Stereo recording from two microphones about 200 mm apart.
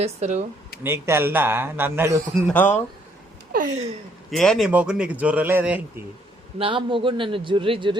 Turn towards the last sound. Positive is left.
turn(degrees=-25)  # may be behind; listen again after turning